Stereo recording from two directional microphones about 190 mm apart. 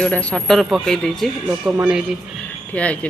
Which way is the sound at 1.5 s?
10° right (ahead or behind).